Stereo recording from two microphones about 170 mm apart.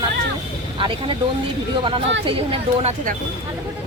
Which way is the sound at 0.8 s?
30° right (ahead or behind).